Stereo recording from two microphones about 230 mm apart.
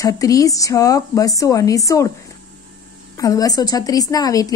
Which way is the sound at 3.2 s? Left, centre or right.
Centre.